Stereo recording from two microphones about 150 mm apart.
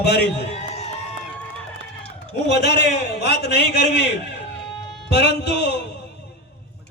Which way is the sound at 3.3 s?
90° left.